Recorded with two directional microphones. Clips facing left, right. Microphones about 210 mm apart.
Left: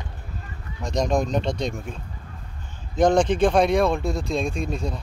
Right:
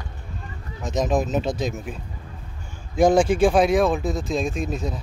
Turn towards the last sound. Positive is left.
turn(degrees=0)  # may be behind; listen again after turning